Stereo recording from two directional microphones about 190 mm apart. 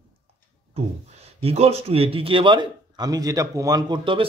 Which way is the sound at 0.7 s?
35° right (ahead or behind).